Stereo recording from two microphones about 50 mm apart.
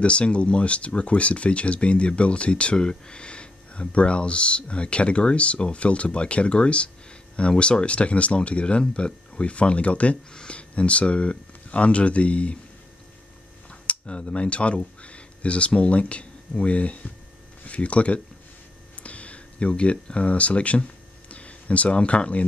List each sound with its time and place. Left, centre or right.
0.0 s speech: left
13.7 s speech: left
19.0 s a sound: left